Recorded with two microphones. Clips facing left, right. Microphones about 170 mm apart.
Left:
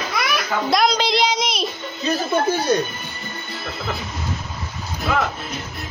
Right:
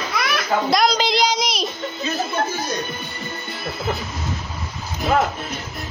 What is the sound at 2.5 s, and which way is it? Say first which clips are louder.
Music: left 7 dB; 65° left (ahead or behind).